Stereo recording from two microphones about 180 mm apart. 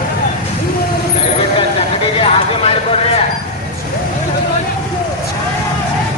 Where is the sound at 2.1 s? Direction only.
30° left (ahead or behind).